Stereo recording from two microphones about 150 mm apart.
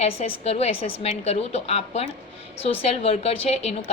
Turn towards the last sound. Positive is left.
turn(degrees=45)  # may be behind; listen again after turning